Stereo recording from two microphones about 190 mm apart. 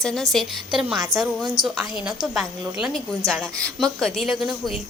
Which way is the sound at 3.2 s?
15° right (ahead or behind).